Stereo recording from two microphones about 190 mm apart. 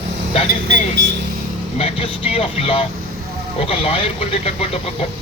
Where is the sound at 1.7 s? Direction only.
30° left (ahead or behind).